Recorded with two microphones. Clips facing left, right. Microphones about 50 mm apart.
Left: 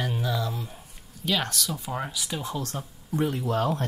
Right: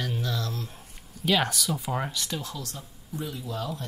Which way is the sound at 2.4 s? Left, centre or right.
Left.